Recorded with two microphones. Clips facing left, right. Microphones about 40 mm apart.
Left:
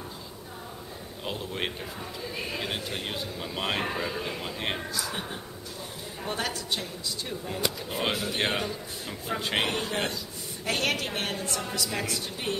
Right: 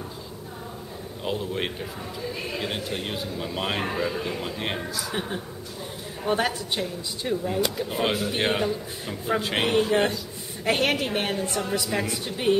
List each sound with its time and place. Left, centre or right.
1.2 s speech: centre
6.2 s speech: centre
10.6 s a woman's voice: right